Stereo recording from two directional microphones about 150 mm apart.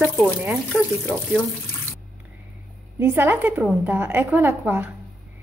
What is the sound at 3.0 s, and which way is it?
A woman's voice, 15° right (ahead or behind).